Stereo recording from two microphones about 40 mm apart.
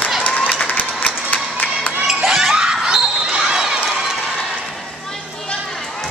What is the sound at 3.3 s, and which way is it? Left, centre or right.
Basketball bounce, centre.